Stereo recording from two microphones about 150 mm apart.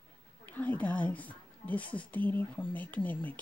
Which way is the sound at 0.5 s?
10° left (ahead or behind).